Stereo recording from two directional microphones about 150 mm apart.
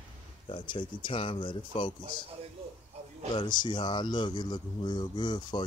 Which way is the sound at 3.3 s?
30° left (ahead or behind).